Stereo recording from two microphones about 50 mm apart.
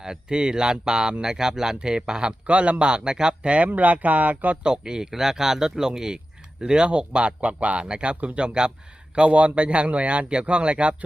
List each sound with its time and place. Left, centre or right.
0.0 s speech: centre
2.5 s speech: right
4.6 s speech: centre